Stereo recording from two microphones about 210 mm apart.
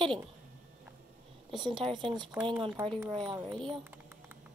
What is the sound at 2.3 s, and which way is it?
Speech, 5° right (ahead or behind).